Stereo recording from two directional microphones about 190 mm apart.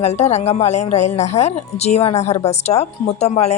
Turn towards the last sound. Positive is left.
turn(degrees=35)  # may be behind; listen again after turning